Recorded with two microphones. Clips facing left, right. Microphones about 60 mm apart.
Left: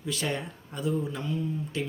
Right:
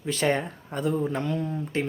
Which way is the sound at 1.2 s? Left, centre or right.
Right.